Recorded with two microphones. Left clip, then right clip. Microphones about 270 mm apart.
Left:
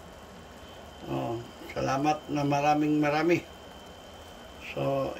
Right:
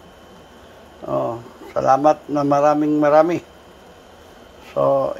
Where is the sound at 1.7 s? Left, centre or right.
Centre.